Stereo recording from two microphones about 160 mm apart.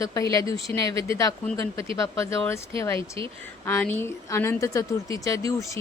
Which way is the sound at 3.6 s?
10° left (ahead or behind).